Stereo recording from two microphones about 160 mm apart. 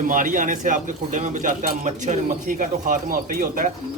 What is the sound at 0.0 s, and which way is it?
A man's voice, 55° right (ahead or behind).